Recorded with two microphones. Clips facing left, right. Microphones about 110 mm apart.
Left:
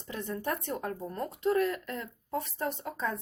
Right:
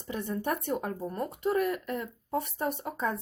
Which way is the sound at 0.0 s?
15° right (ahead or behind).